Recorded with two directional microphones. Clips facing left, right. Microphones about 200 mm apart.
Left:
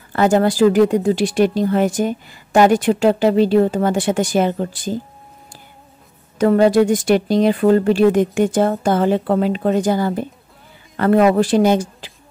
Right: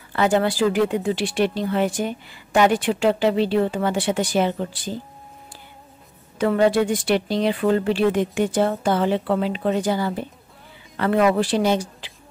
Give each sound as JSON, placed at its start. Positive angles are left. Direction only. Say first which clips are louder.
{"t": 0.1, "sound": "speech", "louder": "left 5 dB", "side_deg": 45}
{"t": 6.3, "sound": "speech", "louder": "left 5 dB", "side_deg": 40}